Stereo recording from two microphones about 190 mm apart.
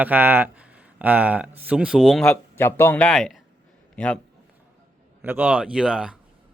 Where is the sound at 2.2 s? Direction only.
10° left (ahead or behind).